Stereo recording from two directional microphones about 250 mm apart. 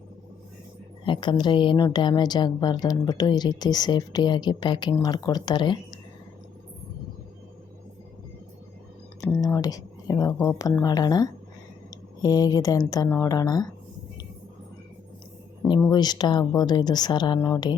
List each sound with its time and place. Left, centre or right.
1.0 s a woman's voice: centre
9.2 s a woman's voice: centre
15.9 s a woman's voice: centre